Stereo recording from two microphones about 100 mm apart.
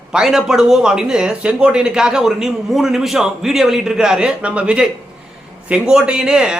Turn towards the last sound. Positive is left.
turn(degrees=-5)  # may be behind; listen again after turning